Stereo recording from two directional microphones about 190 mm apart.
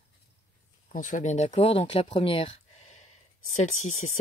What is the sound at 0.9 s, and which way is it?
Speech, 40° left (ahead or behind).